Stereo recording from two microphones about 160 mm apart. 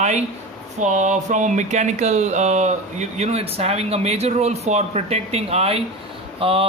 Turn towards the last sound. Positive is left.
turn(degrees=-35)  # may be behind; listen again after turning